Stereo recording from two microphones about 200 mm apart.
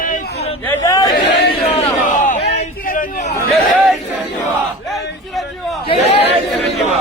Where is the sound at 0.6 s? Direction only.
10° left (ahead or behind).